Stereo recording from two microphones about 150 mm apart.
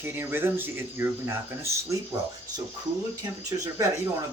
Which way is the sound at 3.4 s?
20° right (ahead or behind).